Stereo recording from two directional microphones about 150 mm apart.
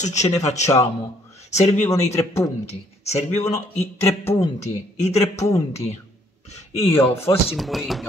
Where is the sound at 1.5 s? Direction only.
50° left (ahead or behind).